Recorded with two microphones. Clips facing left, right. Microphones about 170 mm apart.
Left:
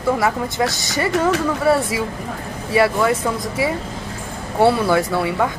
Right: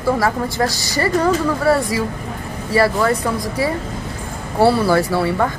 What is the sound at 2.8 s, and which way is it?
Speech, centre (ahead or behind).